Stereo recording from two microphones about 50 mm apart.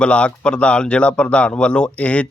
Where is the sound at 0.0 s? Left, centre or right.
Left.